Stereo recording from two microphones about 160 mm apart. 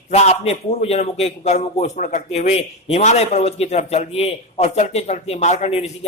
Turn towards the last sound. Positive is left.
turn(degrees=40)  # may be behind; listen again after turning